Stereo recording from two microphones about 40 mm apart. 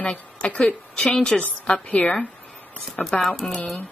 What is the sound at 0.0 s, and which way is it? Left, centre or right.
A woman's voice, left.